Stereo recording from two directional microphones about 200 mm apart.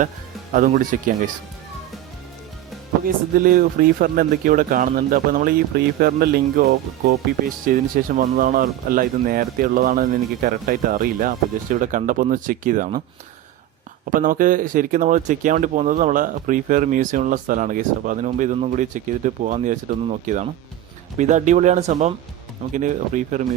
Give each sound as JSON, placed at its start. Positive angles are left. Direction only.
{"t": 0.5, "sound": "speech", "side_deg": -45}
{"t": 3.4, "sound": "speech", "side_deg": -45}
{"t": 14.0, "sound": "speech", "side_deg": -40}